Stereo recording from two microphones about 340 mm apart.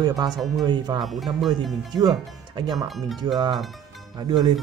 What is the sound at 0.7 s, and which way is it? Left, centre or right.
Speech, centre.